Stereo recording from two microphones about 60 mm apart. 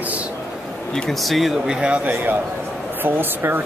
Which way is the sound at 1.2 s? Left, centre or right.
Centre.